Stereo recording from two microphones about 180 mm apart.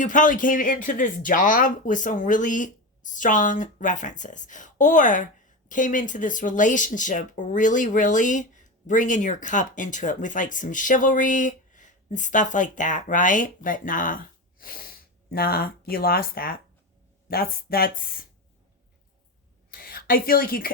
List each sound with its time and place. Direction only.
0.0 s speech: 45° left (ahead or behind)
19.7 s speech: 55° left (ahead or behind)